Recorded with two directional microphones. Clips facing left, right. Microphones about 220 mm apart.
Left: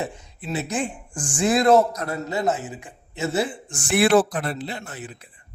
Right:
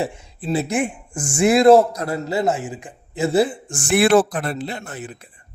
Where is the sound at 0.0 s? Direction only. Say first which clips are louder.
Right 5 dB; 30° right (ahead or behind).